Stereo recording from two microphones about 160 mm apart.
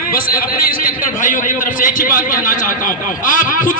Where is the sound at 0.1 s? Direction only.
65° left (ahead or behind).